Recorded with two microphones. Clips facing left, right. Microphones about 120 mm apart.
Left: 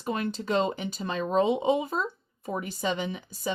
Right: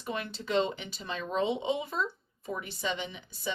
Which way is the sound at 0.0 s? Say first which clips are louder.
Left 6 dB; 40° left (ahead or behind).